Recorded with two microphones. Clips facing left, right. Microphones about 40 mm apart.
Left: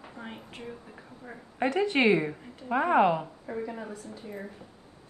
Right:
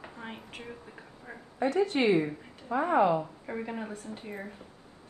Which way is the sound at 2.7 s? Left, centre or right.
Left.